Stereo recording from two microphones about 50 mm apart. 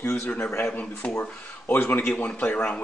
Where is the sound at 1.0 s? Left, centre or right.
Centre.